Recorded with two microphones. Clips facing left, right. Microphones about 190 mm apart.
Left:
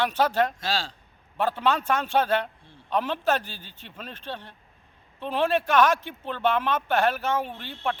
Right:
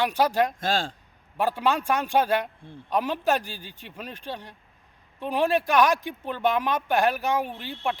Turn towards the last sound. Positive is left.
turn(degrees=-10)  # may be behind; listen again after turning